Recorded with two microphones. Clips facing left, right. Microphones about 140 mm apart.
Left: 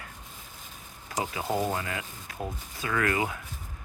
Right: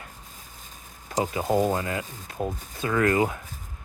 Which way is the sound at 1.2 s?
30° right (ahead or behind).